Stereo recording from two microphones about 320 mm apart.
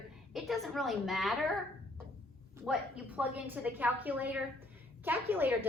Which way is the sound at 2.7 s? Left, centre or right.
Centre.